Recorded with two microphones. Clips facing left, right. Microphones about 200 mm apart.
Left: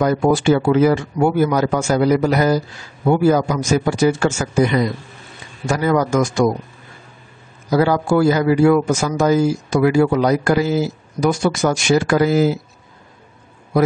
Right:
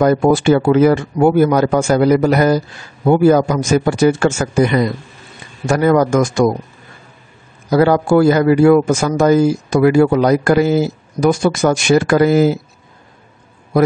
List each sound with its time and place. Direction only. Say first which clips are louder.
0.0 s a man's voice: right 3 dB; 55° right (ahead or behind)
7.7 s speech: right 4 dB; 55° right (ahead or behind)